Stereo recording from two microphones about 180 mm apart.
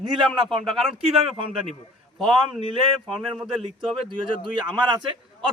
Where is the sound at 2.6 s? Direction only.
30° right (ahead or behind).